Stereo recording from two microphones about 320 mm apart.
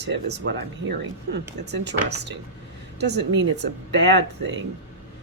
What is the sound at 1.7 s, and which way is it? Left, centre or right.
Speech, right.